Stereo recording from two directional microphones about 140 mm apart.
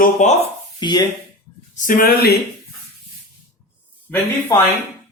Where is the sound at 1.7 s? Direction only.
70° left (ahead or behind).